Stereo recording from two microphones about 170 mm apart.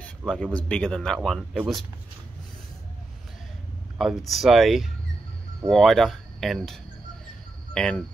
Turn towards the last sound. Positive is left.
turn(degrees=5)  # may be behind; listen again after turning